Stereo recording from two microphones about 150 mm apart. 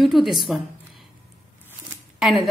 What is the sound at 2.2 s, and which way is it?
Speech, centre (ahead or behind).